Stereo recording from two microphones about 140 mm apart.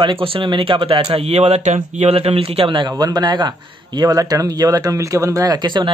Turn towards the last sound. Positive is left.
turn(degrees=-35)  # may be behind; listen again after turning